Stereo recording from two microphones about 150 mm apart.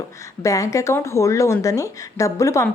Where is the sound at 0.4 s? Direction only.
20° left (ahead or behind).